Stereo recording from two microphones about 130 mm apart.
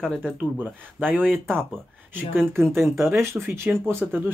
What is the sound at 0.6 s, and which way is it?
Speech, 15° right (ahead or behind).